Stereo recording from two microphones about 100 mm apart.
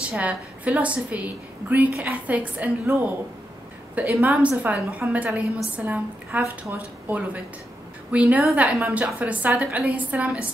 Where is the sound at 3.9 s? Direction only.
15° right (ahead or behind).